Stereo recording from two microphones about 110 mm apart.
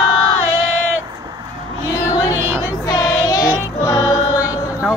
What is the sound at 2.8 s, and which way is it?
Child singing, 35° left (ahead or behind).